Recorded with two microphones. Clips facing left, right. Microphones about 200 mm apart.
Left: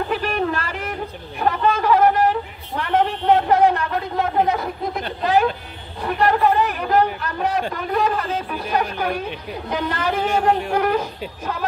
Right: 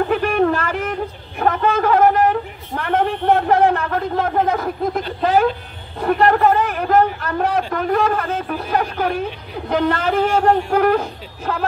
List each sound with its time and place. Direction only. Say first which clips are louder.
0.1 s a sound: right 5 dB; 50° right (ahead or behind)
5.9 s a man's voice: right 4 dB; 50° right (ahead or behind)
9.7 s speech: right 5 dB; 55° right (ahead or behind)